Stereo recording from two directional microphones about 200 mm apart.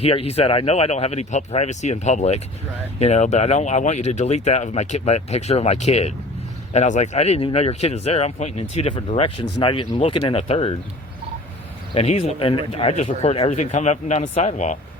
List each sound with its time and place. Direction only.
0.0 s speech: 30° left (ahead or behind)
11.9 s speech: 30° left (ahead or behind)